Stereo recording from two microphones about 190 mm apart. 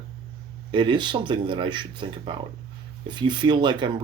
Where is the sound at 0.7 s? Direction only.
25° right (ahead or behind).